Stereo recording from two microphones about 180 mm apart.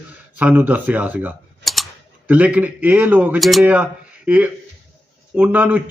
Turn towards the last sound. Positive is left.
turn(degrees=-10)  # may be behind; listen again after turning